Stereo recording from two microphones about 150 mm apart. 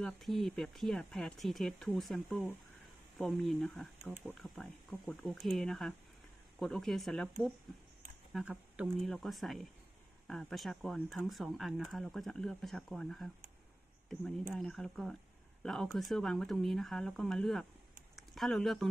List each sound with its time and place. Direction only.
0.0 s speech: centre (ahead or behind)
8.3 s speech: 5° right (ahead or behind)